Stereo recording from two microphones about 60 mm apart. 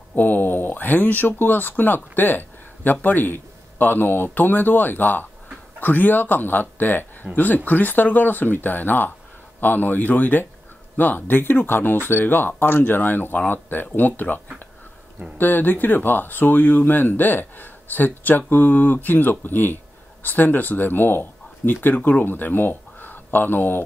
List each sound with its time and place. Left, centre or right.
0.1 s a man's voice: left